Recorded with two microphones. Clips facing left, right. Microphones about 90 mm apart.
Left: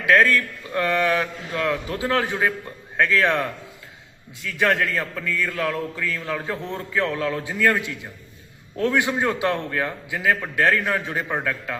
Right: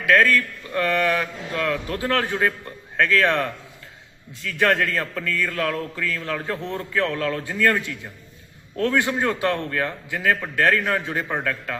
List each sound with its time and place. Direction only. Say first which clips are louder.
0.0 s a man's voice: even; 20° left (ahead or behind)
4.4 s a man's voice: right 1 dB; 5° left (ahead or behind)